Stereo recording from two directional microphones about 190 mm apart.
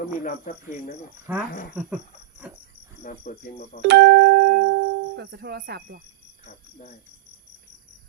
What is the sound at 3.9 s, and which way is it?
Music, 65° right (ahead or behind).